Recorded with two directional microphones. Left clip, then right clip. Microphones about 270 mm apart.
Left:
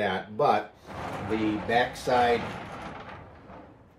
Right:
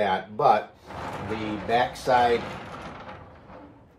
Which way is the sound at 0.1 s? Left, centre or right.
Centre.